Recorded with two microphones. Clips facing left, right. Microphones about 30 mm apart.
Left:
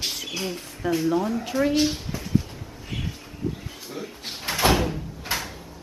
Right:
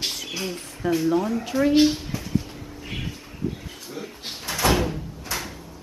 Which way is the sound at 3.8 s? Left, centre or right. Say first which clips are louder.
Even; centre.